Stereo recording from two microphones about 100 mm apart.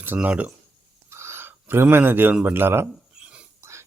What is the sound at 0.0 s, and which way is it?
Speech, 15° right (ahead or behind).